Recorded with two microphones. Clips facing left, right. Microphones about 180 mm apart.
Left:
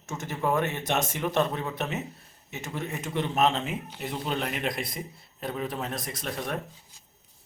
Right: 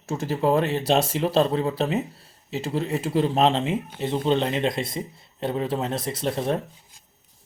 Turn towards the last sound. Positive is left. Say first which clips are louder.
# right 8 dB
turn(degrees=-30)  # may be behind; listen again after turning